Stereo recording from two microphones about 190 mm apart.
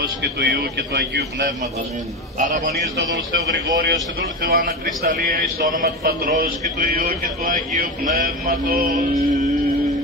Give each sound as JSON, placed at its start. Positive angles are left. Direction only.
{"t": 0.2, "sound": "a man's voice", "side_deg": -55}
{"t": 2.3, "sound": "speech", "side_deg": -40}
{"t": 3.7, "sound": "speech", "side_deg": -50}